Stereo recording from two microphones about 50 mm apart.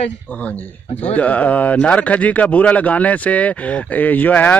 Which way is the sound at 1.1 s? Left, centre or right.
Left.